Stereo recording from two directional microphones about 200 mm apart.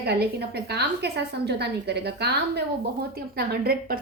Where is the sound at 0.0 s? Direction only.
55° right (ahead or behind).